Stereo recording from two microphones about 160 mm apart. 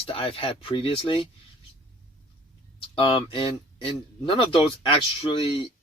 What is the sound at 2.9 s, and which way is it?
Speech, 35° left (ahead or behind).